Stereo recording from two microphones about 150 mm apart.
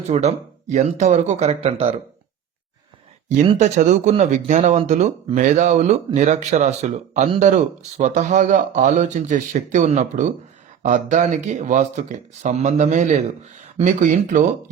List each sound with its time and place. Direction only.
0.1 s speech: 50° right (ahead or behind)
3.6 s speech: 55° right (ahead or behind)